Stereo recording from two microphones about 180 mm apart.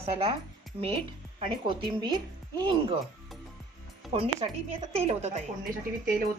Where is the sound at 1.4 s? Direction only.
30° right (ahead or behind).